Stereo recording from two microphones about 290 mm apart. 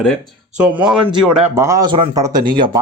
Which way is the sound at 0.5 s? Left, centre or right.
Centre.